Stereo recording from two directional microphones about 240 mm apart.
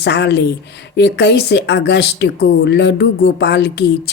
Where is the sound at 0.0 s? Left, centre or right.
Left.